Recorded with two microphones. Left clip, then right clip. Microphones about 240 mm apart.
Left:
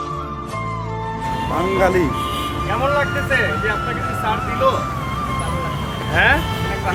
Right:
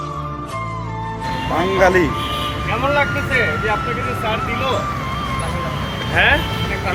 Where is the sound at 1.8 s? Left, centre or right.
Centre.